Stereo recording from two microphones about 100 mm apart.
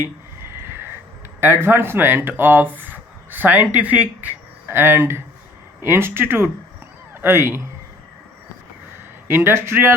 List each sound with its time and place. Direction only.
0.5 s a sound: 25° right (ahead or behind)
1.4 s speech: 20° right (ahead or behind)
9.2 s speech: 25° right (ahead or behind)